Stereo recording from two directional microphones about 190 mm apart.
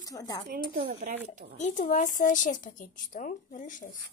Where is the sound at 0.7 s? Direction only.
45° right (ahead or behind).